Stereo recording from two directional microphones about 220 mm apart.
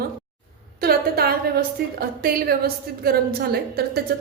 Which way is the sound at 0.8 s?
45° right (ahead or behind).